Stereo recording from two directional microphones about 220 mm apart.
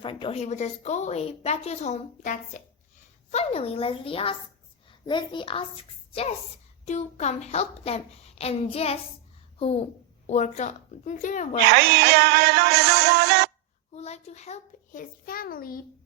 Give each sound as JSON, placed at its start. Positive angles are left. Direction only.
{"t": 0.0, "sound": "a woman's voice", "side_deg": 20}
{"t": 6.8, "sound": "a woman's voice", "side_deg": 30}
{"t": 11.6, "sound": "music", "side_deg": -45}
{"t": 13.9, "sound": "a child's voice", "side_deg": 30}